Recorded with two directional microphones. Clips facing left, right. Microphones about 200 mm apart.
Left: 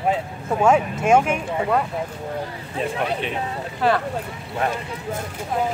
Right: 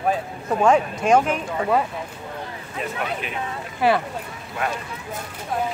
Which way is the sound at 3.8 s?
10° right (ahead or behind).